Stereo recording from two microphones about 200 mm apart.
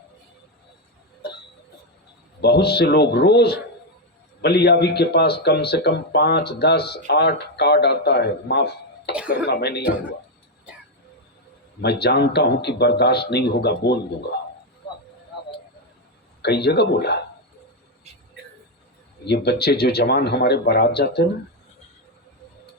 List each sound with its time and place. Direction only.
2.4 s speech: 55° left (ahead or behind)
11.8 s speech: 55° left (ahead or behind)
16.4 s speech: 55° left (ahead or behind)
19.2 s speech: 55° left (ahead or behind)